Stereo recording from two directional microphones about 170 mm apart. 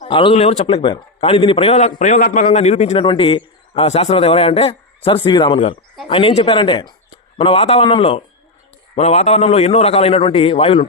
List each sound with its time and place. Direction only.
0.1 s a man's voice: 30° left (ahead or behind)
0.8 s a man's voice: 30° left (ahead or behind)
3.0 s a man's voice: 30° left (ahead or behind)